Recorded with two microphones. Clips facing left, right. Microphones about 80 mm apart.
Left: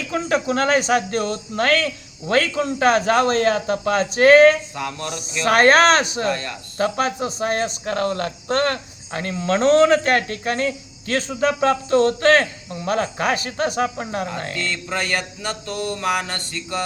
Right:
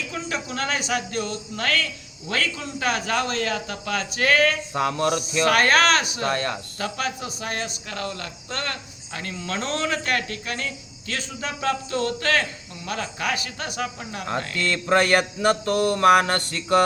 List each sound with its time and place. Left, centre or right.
0.1 s speech: left
4.7 s mantra: right
5.5 s speech: left
6.2 s mantra: right
6.7 s speech: left
14.7 s mantra: right